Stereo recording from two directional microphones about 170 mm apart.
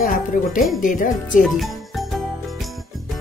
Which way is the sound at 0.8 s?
50° left (ahead or behind).